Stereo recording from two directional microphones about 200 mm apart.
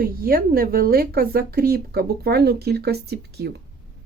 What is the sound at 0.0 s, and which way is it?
A woman's voice, 45° right (ahead or behind).